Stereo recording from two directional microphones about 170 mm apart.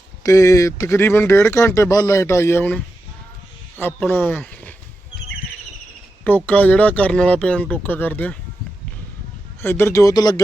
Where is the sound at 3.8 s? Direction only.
10° left (ahead or behind).